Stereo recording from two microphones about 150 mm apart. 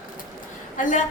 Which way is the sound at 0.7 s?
60° left (ahead or behind).